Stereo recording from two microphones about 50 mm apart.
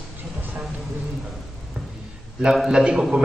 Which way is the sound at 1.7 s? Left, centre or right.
Right.